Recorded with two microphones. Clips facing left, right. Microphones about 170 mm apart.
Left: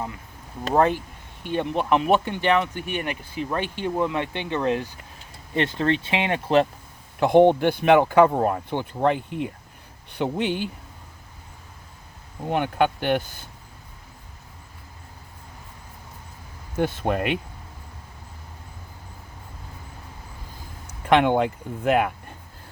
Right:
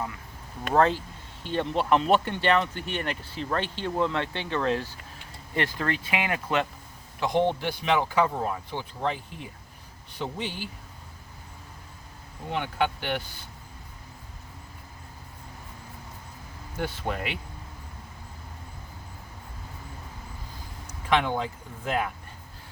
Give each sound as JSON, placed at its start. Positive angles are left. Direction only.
{"t": 0.7, "sound": "speech", "side_deg": 15}
{"t": 7.2, "sound": "speech", "side_deg": 55}
{"t": 12.5, "sound": "speech", "side_deg": 50}
{"t": 16.7, "sound": "speech", "side_deg": 55}
{"t": 21.1, "sound": "speech", "side_deg": 60}